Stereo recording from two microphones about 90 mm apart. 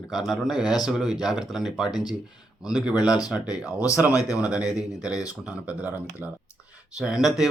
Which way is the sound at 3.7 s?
35° left (ahead or behind).